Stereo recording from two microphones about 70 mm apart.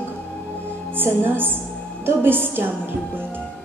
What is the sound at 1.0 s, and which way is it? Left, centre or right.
A woman's voice, right.